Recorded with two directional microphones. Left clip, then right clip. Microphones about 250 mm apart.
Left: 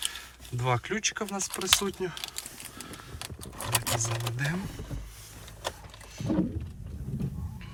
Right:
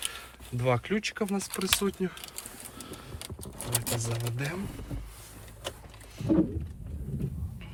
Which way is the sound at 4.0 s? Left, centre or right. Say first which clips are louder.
Left 3 dB; centre.